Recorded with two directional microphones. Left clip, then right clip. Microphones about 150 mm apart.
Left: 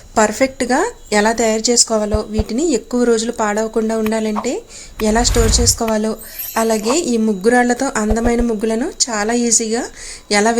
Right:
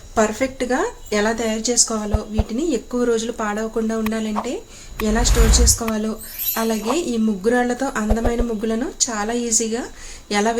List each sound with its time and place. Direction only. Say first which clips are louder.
0.1 s speech: left 5 dB; 55° left (ahead or behind)